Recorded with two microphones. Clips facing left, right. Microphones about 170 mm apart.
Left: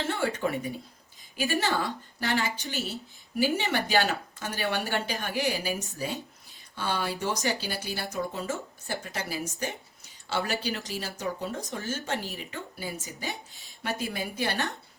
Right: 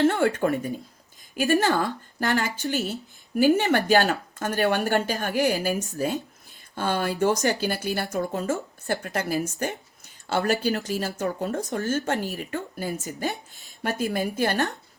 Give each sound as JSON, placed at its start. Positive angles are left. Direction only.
{"t": 0.0, "sound": "speech", "side_deg": -55}
{"t": 4.1, "sound": "speech", "side_deg": -50}